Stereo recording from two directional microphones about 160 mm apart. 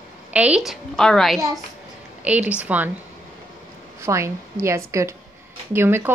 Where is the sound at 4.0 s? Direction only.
15° right (ahead or behind).